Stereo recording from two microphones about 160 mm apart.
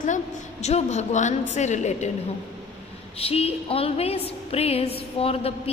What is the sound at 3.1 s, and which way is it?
A woman's voice, 40° left (ahead or behind).